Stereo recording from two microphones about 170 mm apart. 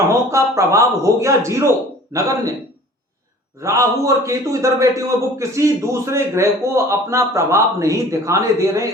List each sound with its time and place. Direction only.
0.3 s a man's voice: 15° right (ahead or behind)
3.6 s a man's voice: 20° right (ahead or behind)